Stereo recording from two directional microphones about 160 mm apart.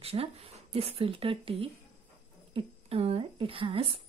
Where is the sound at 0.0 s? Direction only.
40° right (ahead or behind).